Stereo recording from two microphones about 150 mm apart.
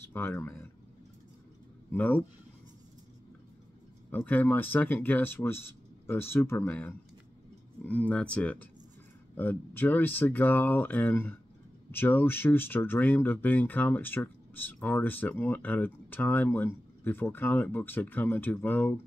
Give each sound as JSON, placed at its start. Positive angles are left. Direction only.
{"t": 0.1, "sound": "speech", "side_deg": 15}
{"t": 1.9, "sound": "speech", "side_deg": 10}
{"t": 4.1, "sound": "speech", "side_deg": 10}